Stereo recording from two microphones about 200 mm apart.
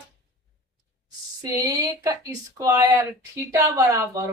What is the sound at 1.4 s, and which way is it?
Speech, 15° right (ahead or behind).